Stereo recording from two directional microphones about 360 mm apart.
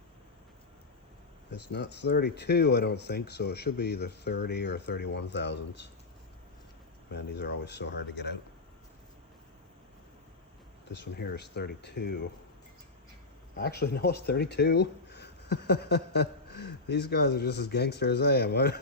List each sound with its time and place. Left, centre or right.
1.7 s speech: left
7.1 s speech: left
10.9 s speech: left
13.6 s speech: left